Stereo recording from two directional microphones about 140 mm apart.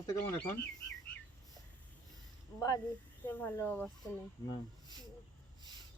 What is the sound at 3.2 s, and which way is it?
Speech, 15° left (ahead or behind).